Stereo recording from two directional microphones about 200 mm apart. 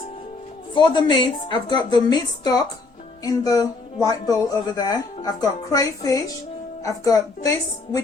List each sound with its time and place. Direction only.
0.7 s speech: 20° left (ahead or behind)